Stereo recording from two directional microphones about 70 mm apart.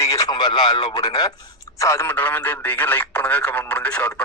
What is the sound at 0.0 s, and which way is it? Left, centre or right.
Radio, left.